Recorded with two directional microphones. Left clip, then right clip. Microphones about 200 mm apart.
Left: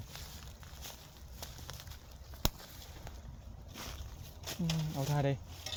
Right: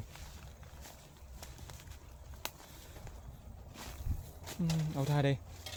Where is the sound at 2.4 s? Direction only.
55° left (ahead or behind).